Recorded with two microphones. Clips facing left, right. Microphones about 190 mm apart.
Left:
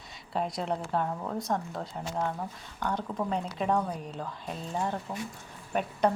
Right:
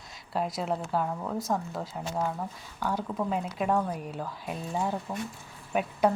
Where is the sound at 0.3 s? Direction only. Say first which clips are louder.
Right 1 dB; centre (ahead or behind).